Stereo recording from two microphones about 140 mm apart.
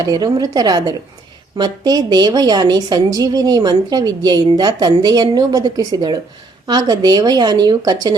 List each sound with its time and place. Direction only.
0.0 s a woman's voice: 30° right (ahead or behind)